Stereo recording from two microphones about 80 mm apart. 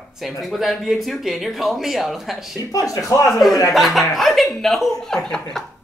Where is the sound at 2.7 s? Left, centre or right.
Left.